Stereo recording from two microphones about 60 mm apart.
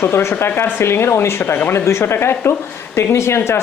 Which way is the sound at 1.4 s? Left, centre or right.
Left.